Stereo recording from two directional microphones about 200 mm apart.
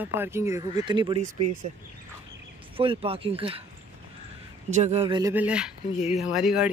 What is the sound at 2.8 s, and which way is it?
Speech, 25° right (ahead or behind).